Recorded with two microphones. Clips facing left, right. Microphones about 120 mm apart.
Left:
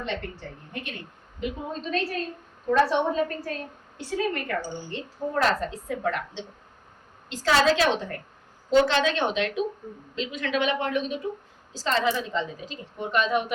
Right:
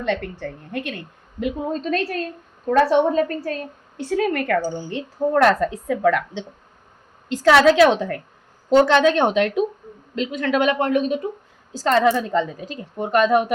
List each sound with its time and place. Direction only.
0.0 s a woman's voice: 60° right (ahead or behind)
1.7 s a woman's voice: 45° right (ahead or behind)
4.0 s a woman's voice: 60° right (ahead or behind)
5.9 s a woman's voice: 70° right (ahead or behind)
8.7 s a woman's voice: 50° right (ahead or behind)